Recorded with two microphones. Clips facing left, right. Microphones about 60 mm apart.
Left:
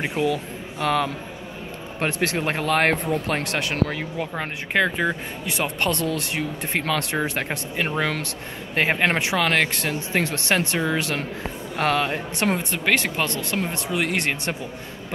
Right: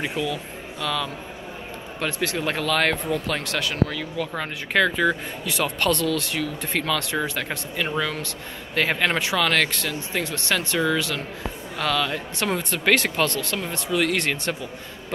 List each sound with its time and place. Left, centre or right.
0.0 s speech: left
4.4 s speech: left
9.8 s speech: left
10.7 s speech: left
11.7 s speech: left
12.5 s speech: centre